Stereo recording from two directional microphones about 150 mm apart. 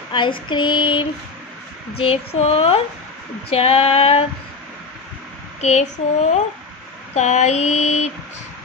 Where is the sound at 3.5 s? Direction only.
40° left (ahead or behind).